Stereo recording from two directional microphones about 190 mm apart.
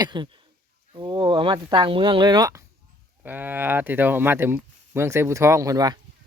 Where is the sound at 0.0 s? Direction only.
25° right (ahead or behind).